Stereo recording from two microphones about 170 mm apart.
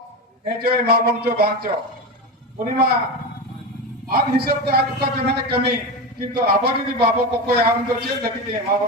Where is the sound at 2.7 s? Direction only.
65° right (ahead or behind).